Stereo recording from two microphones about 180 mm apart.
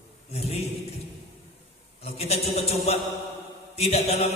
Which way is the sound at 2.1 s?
35° left (ahead or behind).